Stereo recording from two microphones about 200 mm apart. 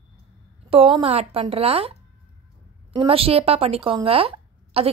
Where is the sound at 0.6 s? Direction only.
30° right (ahead or behind).